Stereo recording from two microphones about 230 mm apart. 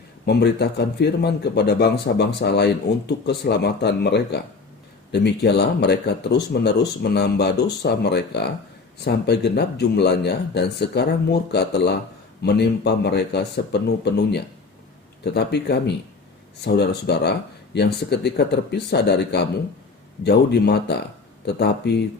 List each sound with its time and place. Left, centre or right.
0.3 s speech: left